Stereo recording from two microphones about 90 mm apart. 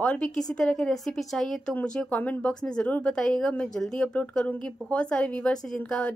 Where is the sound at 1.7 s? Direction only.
15° left (ahead or behind).